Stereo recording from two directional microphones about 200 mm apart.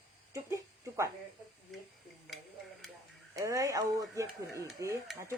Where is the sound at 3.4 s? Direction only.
15° right (ahead or behind).